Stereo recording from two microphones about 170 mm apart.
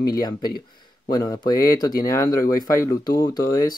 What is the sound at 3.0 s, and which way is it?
Speech, 25° left (ahead or behind).